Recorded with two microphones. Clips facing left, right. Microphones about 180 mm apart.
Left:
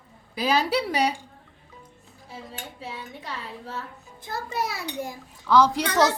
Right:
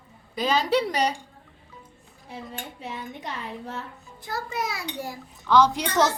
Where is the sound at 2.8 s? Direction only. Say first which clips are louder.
Right 2 dB; 20° right (ahead or behind).